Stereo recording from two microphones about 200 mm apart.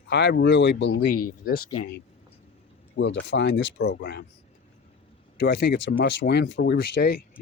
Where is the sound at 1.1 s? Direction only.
50° left (ahead or behind).